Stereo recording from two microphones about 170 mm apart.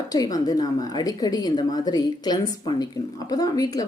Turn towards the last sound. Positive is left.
turn(degrees=20)  # may be behind; listen again after turning